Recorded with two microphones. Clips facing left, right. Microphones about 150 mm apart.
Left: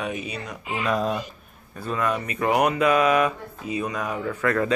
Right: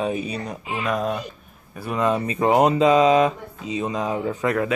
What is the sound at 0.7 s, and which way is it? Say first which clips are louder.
Speech: even; centre (ahead or behind).